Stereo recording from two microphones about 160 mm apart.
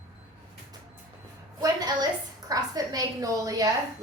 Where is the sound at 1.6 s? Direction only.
25° right (ahead or behind).